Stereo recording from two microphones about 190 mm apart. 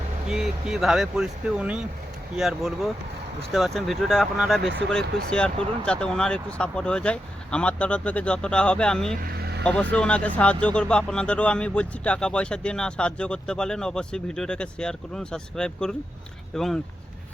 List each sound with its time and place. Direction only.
0.3 s speech: 5° right (ahead or behind)
9.2 s vehicle: 55° right (ahead or behind)
9.6 s speech: 5° left (ahead or behind)